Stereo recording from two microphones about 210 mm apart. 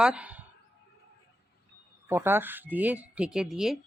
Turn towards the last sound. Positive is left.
turn(degrees=0)  # may be behind; listen again after turning